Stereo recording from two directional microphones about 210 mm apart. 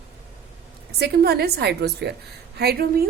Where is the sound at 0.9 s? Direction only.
50° right (ahead or behind).